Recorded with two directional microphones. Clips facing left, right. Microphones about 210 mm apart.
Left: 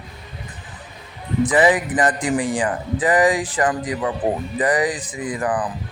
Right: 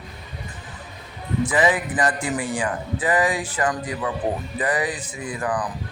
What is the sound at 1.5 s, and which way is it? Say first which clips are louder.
Speech: left 4 dB; 35° left (ahead or behind).